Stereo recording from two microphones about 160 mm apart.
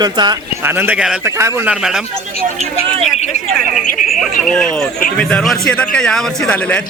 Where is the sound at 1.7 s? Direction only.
5° right (ahead or behind).